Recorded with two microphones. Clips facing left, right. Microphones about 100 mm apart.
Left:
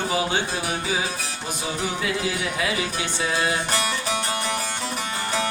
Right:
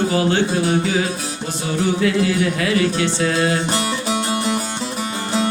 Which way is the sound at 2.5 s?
10° left (ahead or behind).